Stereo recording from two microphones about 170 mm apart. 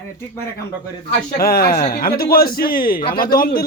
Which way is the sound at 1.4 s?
60° left (ahead or behind).